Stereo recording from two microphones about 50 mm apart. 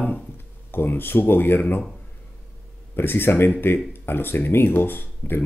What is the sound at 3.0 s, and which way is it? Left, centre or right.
Speech, left.